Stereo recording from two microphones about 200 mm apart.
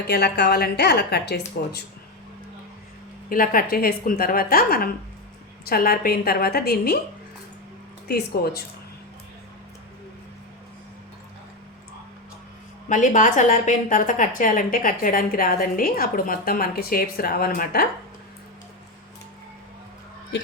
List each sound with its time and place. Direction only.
0.1 s a woman's voice: 55° left (ahead or behind)
3.2 s a woman's voice: 45° left (ahead or behind)
8.0 s a woman's voice: 50° left (ahead or behind)
12.9 s a woman's voice: 40° left (ahead or behind)